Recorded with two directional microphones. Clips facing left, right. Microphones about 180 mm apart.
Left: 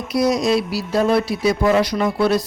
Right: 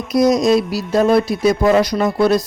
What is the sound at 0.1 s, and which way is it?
Speech, 45° right (ahead or behind).